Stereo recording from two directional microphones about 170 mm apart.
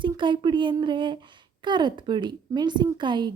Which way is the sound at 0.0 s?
30° right (ahead or behind).